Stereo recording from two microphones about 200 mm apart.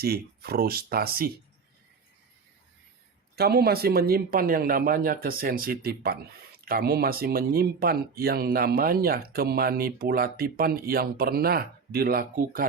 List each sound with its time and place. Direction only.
0.0 s speech: 50° right (ahead or behind)
3.3 s speech: 50° right (ahead or behind)